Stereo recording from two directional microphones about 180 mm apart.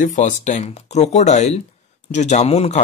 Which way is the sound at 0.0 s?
45° left (ahead or behind).